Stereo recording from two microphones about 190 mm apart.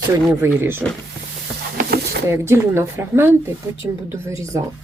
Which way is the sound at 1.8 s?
55° right (ahead or behind).